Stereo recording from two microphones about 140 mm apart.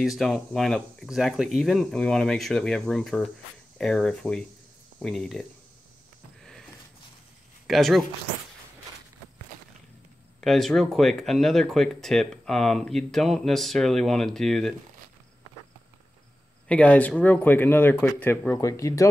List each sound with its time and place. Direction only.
0.0 s speech: centre (ahead or behind)
7.6 s speech: centre (ahead or behind)
10.4 s speech: centre (ahead or behind)
16.6 s speech: 10° left (ahead or behind)